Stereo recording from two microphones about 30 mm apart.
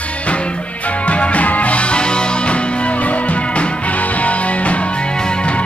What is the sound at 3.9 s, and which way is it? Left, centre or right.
Music, left.